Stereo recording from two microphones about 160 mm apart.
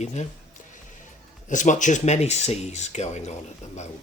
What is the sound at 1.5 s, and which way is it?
Speech, 50° left (ahead or behind).